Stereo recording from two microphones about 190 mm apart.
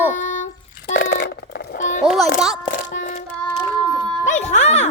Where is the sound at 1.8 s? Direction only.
40° left (ahead or behind).